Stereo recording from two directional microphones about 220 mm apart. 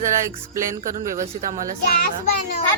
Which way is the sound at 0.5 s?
15° right (ahead or behind).